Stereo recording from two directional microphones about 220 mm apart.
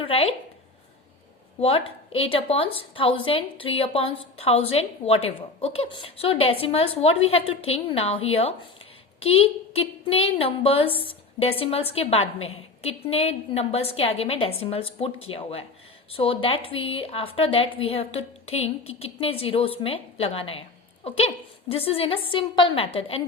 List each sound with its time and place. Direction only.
0.0 s a woman's voice: 25° left (ahead or behind)
1.5 s a woman's voice: 25° left (ahead or behind)